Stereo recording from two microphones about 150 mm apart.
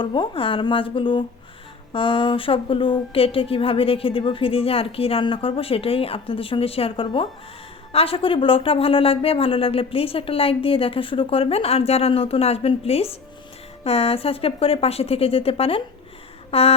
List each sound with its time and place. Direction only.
0.0 s speech: 30° left (ahead or behind)